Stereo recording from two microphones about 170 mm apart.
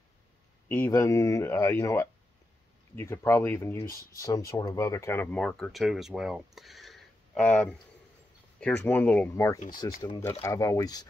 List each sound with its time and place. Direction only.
0.7 s speech: 15° left (ahead or behind)